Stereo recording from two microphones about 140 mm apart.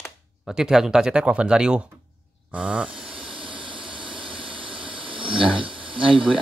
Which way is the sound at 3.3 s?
35° right (ahead or behind).